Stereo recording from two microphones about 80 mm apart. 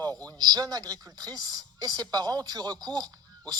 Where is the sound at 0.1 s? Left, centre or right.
Centre.